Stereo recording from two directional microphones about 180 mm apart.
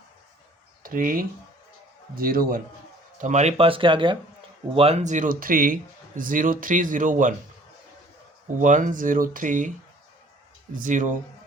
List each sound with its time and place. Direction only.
0.8 s speech: 50° right (ahead or behind)
3.2 s speech: 40° right (ahead or behind)
8.5 s speech: 45° right (ahead or behind)
10.8 s speech: 45° right (ahead or behind)